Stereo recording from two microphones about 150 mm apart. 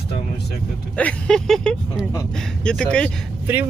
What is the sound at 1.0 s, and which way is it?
Speech, 5° left (ahead or behind).